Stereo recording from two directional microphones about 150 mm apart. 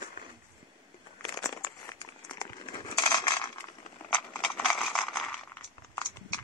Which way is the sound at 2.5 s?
30° left (ahead or behind).